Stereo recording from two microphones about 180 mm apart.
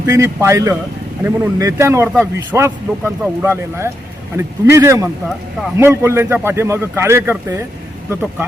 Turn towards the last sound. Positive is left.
turn(degrees=-15)  # may be behind; listen again after turning